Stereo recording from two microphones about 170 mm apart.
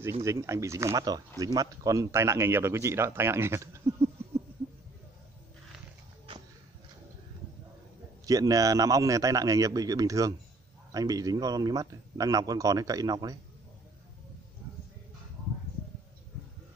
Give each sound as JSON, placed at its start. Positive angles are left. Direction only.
{"t": 0.2, "sound": "a man's voice", "side_deg": -15}
{"t": 8.3, "sound": "a man's voice", "side_deg": -20}